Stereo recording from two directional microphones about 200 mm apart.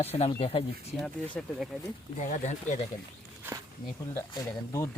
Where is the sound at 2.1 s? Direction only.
35° left (ahead or behind).